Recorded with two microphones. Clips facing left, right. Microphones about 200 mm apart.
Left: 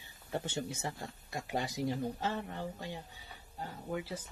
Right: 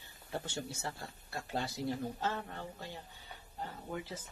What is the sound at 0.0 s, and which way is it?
Speech, 15° left (ahead or behind).